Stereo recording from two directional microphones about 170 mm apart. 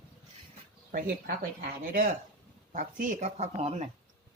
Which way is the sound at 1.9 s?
55° right (ahead or behind).